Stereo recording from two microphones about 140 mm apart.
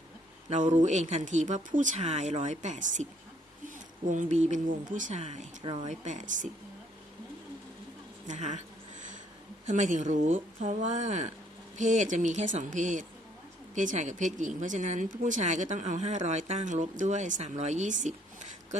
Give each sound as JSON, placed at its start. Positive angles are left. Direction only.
{"t": 0.5, "sound": "speech", "side_deg": -60}
{"t": 4.1, "sound": "speech", "side_deg": -60}
{"t": 8.3, "sound": "speech", "side_deg": -60}
{"t": 9.6, "sound": "speech", "side_deg": -60}